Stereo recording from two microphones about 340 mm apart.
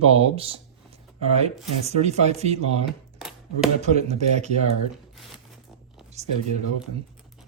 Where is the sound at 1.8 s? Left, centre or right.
Centre.